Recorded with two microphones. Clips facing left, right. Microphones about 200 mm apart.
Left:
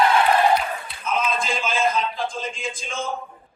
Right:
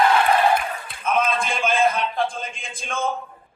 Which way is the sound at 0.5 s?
55° right (ahead or behind).